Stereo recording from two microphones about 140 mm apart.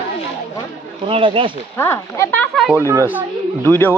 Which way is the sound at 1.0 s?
40° right (ahead or behind).